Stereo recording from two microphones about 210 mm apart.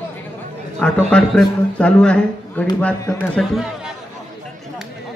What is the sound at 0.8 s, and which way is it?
A man's voice, 5° left (ahead or behind).